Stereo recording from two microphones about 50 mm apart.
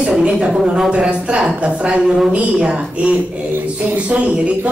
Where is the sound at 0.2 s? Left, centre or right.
Centre.